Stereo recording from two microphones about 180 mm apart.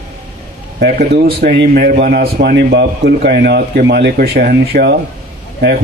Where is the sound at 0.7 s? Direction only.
65° right (ahead or behind).